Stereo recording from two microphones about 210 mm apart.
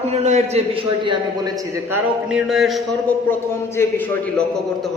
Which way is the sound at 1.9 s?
5° right (ahead or behind).